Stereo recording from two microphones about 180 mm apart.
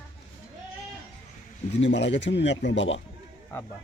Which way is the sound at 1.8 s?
80° left.